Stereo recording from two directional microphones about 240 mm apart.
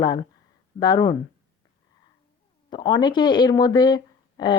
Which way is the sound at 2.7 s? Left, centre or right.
Centre.